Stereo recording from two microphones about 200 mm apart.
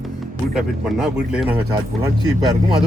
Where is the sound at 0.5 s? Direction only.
Centre (ahead or behind).